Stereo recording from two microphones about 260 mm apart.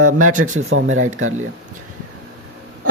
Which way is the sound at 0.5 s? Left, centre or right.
Right.